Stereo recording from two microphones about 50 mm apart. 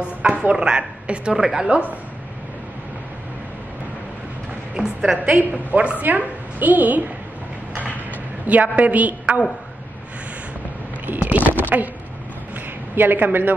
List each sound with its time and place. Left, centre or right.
0.2 s a woman's voice: right
1.7 s a woman's voice: right
4.7 s a woman's voice: centre
5.2 s a woman's voice: right
8.5 s a woman's voice: right
11.1 s a sound: right
12.9 s a woman's voice: right